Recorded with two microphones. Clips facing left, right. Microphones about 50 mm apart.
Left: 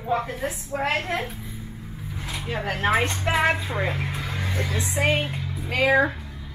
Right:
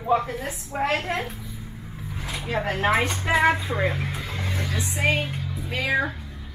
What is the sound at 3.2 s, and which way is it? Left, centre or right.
Speech, centre.